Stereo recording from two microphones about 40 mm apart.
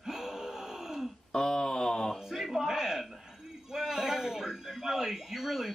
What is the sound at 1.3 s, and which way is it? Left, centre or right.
Speech, centre.